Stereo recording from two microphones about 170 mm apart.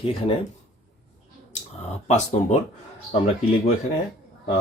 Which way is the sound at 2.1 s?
40° left (ahead or behind).